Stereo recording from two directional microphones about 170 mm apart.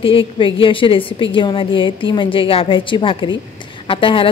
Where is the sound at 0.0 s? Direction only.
30° left (ahead or behind).